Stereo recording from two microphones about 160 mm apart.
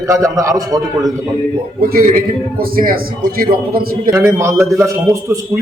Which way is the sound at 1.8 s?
65° right (ahead or behind).